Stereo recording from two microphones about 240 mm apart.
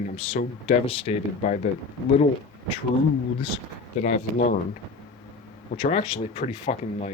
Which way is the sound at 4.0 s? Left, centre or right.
Left.